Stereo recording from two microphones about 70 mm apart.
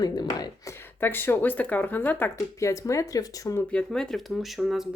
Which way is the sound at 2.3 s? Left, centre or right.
Left.